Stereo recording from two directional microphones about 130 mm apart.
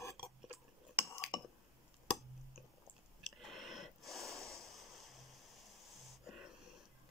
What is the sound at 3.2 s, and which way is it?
Snort, centre (ahead or behind).